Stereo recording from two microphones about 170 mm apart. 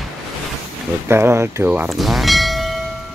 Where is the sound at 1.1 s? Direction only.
15° right (ahead or behind).